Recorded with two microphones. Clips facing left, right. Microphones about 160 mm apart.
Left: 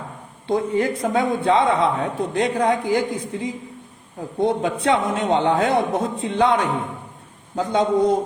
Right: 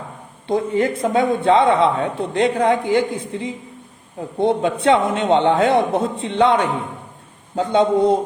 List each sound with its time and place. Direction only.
0.4 s speech: 25° right (ahead or behind)
7.5 s speech: 25° right (ahead or behind)